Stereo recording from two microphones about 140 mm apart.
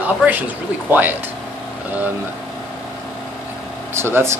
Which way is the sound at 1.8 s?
10° right (ahead or behind).